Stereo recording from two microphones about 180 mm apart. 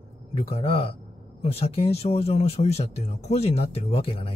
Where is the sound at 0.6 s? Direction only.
30° left (ahead or behind).